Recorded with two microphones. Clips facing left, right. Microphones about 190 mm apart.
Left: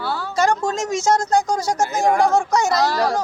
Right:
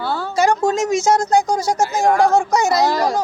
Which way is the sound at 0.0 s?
50° right (ahead or behind).